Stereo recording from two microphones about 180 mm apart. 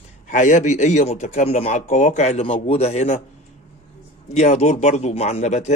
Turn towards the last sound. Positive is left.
turn(degrees=40)  # may be behind; listen again after turning